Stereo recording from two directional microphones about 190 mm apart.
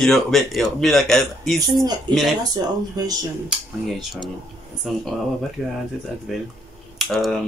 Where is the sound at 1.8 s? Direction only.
20° right (ahead or behind).